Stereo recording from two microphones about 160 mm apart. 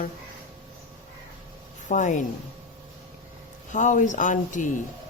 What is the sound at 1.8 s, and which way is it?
Speech, 50° left (ahead or behind).